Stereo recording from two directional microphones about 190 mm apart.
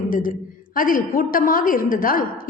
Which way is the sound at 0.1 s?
45° left (ahead or behind).